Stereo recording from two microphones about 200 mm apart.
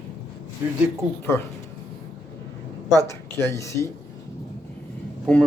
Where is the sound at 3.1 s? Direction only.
15° left (ahead or behind).